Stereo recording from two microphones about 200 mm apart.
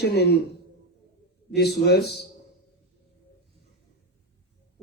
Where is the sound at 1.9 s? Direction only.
55° left (ahead or behind).